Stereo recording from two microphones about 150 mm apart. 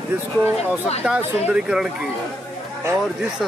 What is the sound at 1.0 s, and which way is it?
Speech, 5° right (ahead or behind).